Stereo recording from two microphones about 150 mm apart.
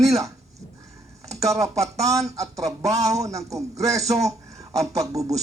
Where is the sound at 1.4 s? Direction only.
20° right (ahead or behind).